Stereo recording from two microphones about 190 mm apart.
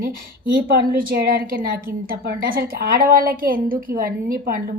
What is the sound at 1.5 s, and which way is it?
A woman's voice, 50° right (ahead or behind).